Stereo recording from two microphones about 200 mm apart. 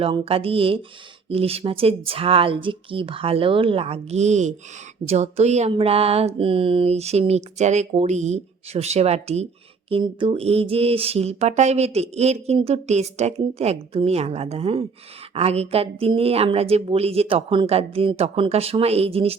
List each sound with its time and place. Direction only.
0.0 s speech: 30° right (ahead or behind)
5.0 s a sound: 35° right (ahead or behind)
15.4 s speech: 30° right (ahead or behind)